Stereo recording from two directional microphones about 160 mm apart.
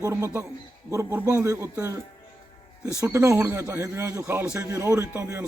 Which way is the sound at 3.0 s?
15° right (ahead or behind).